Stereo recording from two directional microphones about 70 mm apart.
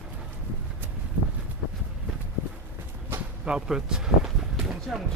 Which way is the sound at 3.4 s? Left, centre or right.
Centre.